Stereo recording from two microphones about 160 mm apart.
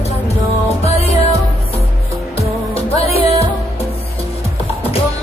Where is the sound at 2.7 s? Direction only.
40° left (ahead or behind).